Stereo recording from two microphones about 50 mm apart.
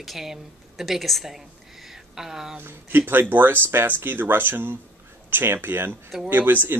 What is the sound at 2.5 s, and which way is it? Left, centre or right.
Speech, right.